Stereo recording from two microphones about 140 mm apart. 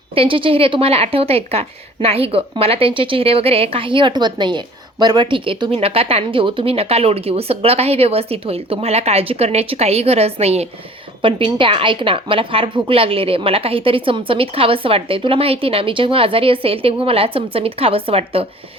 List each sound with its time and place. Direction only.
0.1 s a woman's voice: 40° right (ahead or behind)